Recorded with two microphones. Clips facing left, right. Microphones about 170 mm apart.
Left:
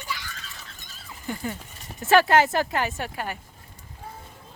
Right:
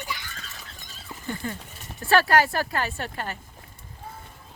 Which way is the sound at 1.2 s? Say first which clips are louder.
Left 1 dB; 10° left (ahead or behind).